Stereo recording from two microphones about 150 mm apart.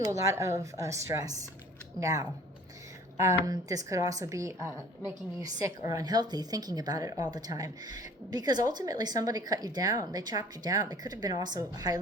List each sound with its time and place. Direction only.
0.1 s speech: 20° right (ahead or behind)
3.4 s speech: 25° right (ahead or behind)